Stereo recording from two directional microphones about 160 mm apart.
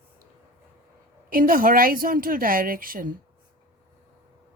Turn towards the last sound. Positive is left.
turn(degrees=-60)  # may be behind; listen again after turning